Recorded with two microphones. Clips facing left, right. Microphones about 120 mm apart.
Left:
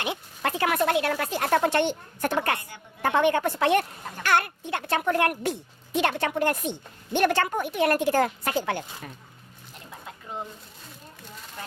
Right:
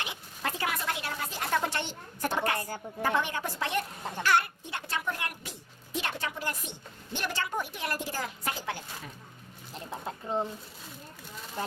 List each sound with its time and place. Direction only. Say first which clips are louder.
0.0 s speech: left 7 dB; 60° left (ahead or behind)
2.6 s a woman's voice: right 8 dB; 40° right (ahead or behind)
3.0 s speech: left 8 dB; 60° left (ahead or behind)
9.9 s a sound: right 5 dB; 30° right (ahead or behind)